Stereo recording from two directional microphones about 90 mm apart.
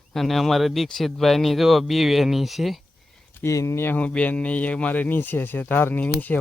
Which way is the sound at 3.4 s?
30° left (ahead or behind).